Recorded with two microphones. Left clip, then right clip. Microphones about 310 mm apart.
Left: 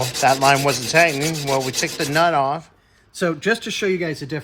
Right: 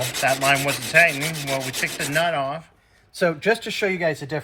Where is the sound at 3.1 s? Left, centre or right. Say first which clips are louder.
Right 1 dB; right.